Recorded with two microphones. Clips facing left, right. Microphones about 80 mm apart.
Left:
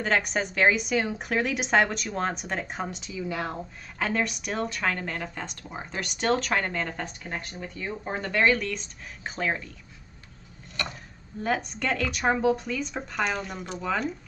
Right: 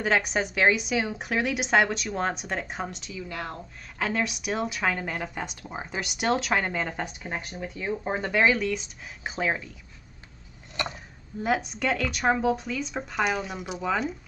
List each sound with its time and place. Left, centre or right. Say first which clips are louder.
0.0 s a woman's voice: right 1 dB; centre
10.8 s speech: right 2 dB; right
11.4 s a woman's voice: right 2 dB; centre